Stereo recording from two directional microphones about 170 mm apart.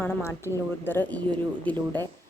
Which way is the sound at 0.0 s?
15° left (ahead or behind).